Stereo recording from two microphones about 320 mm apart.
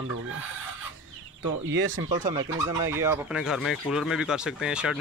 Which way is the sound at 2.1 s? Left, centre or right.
Centre.